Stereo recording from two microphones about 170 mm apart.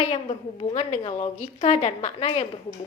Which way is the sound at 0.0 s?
35° left (ahead or behind).